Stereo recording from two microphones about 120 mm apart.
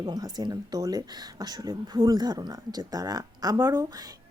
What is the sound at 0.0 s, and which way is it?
Speech, 35° right (ahead or behind).